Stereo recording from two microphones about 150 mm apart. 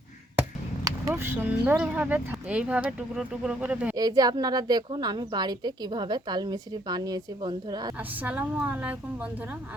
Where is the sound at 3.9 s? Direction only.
25° right (ahead or behind).